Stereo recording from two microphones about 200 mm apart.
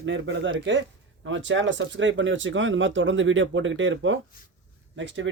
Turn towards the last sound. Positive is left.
turn(degrees=-65)  # may be behind; listen again after turning